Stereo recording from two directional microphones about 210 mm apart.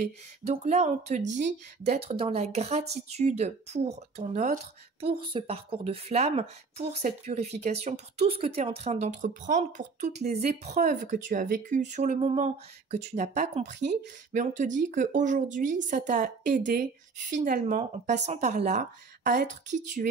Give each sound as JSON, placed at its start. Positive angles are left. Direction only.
{"t": 0.5, "sound": "a woman's voice", "side_deg": -30}